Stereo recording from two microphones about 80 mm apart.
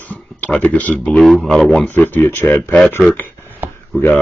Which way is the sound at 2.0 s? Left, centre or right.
Left.